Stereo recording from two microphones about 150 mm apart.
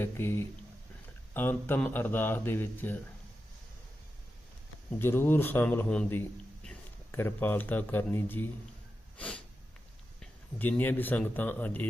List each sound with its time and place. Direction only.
0.0 s speech: 15° left (ahead or behind)
4.9 s speech: 15° left (ahead or behind)
9.1 s sniff: 10° left (ahead or behind)
10.2 s speech: 10° left (ahead or behind)